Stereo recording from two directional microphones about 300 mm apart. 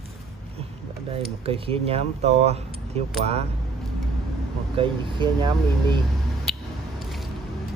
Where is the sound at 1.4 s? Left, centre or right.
Centre.